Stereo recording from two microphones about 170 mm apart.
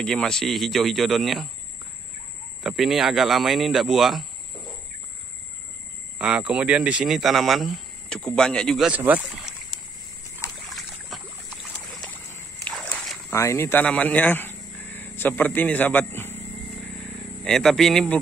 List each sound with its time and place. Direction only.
0.0 s speech: 5° left (ahead or behind)
2.6 s speech: centre (ahead or behind)
6.1 s speech: 5° right (ahead or behind)
10.7 s boat: centre (ahead or behind)
12.0 s dog: 5° left (ahead or behind)
13.3 s speech: 15° left (ahead or behind)
17.4 s speech: centre (ahead or behind)